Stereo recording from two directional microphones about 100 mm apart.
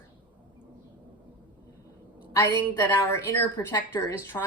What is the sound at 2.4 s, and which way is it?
A woman's voice, 25° left (ahead or behind).